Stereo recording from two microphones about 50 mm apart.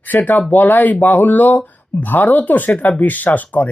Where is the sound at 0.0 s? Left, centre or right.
Left.